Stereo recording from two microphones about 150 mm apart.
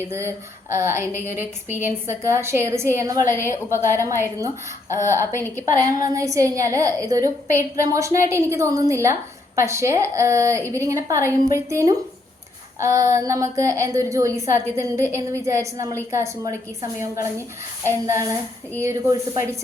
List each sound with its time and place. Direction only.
0.1 s a woman's voice: 20° right (ahead or behind)
3.4 s a woman's voice: 15° left (ahead or behind)
4.0 s a woman's voice: 20° right (ahead or behind)
5.5 s a woman's voice: 20° right (ahead or behind)